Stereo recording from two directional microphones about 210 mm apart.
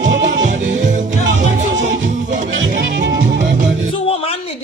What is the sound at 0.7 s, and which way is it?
Music, 35° right (ahead or behind).